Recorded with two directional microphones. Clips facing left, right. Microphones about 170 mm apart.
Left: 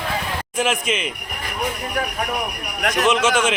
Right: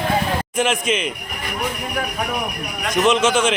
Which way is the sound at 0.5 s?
Centre (ahead or behind).